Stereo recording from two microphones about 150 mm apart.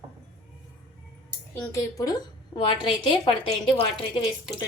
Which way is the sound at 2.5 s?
30° left (ahead or behind).